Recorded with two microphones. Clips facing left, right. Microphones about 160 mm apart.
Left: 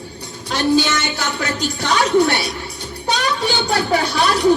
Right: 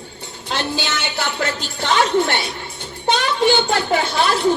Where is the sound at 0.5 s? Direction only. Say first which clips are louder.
Left 7 dB; 40° left (ahead or behind).